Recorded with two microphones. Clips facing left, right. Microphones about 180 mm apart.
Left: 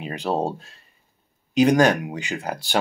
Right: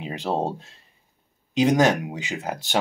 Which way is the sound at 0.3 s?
20° right (ahead or behind).